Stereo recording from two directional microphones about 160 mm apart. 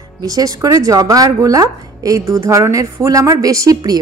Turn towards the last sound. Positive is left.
turn(degrees=-25)  # may be behind; listen again after turning